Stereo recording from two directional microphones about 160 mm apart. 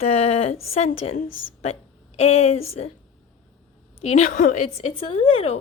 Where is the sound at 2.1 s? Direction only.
40° left (ahead or behind).